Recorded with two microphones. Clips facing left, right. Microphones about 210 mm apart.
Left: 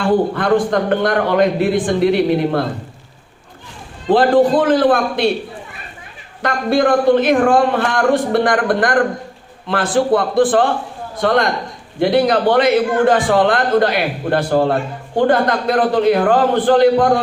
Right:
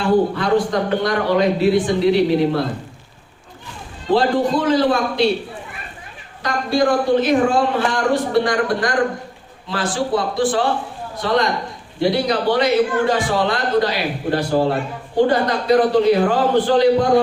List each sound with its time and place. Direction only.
0.3 s a man's voice: 55° left (ahead or behind)
4.1 s a man's voice: 55° left (ahead or behind)
6.4 s a man's voice: 60° left (ahead or behind)